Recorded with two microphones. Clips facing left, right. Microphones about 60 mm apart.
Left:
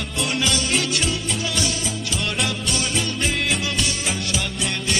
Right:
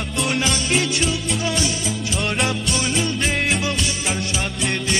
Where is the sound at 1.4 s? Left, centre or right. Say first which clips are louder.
Right 3 dB; right.